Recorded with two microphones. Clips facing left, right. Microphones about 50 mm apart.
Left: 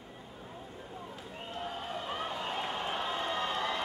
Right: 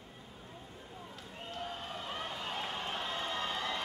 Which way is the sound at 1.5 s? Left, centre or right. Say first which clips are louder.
Left 3 dB; centre.